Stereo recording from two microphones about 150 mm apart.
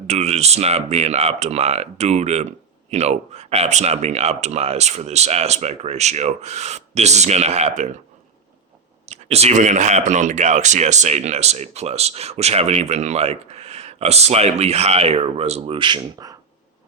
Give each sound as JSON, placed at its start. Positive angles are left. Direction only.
{"t": 0.1, "sound": "speech", "side_deg": -45}
{"t": 9.0, "sound": "speech", "side_deg": -45}